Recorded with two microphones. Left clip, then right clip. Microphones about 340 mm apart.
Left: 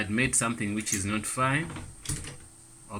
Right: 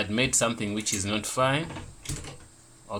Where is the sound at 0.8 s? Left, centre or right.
Centre.